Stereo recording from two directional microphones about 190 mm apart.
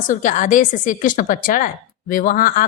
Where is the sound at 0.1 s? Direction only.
45° left (ahead or behind).